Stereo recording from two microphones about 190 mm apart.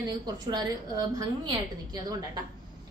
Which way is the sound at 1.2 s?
20° right (ahead or behind).